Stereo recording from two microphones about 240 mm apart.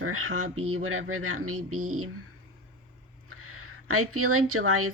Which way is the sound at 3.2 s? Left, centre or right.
Right.